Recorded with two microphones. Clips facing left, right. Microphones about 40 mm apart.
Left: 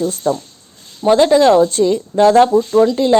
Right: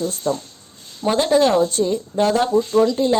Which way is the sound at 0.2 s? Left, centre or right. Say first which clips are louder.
Left 5 dB; left.